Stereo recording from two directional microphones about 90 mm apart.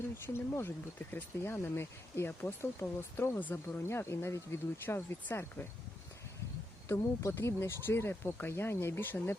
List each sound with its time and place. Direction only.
0.3 s speech: 25° left (ahead or behind)
6.8 s speech: 35° left (ahead or behind)